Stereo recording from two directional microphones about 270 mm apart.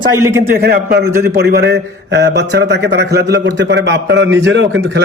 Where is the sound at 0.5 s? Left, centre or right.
Right.